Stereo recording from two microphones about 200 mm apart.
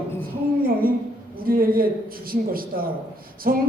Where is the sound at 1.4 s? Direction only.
45° right (ahead or behind).